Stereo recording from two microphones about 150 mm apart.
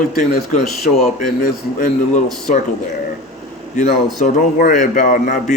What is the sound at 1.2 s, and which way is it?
A man's voice, 60° left (ahead or behind).